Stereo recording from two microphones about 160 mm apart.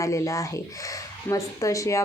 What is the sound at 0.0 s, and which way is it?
Speech, 20° left (ahead or behind).